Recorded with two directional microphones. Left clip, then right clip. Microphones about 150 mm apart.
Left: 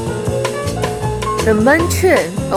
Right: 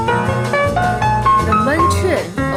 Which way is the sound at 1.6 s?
70° left (ahead or behind).